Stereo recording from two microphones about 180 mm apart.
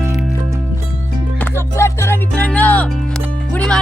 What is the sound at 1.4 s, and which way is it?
Music, 15° left (ahead or behind).